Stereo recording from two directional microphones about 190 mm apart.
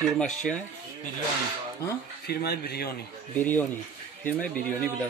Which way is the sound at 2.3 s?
55° left (ahead or behind).